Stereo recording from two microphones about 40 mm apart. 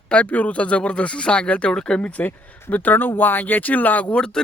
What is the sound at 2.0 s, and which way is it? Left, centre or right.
Speech, left.